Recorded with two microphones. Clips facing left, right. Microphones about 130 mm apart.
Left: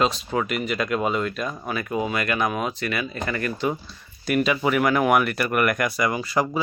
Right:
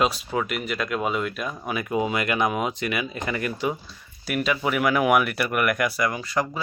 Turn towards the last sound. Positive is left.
turn(degrees=5)  # may be behind; listen again after turning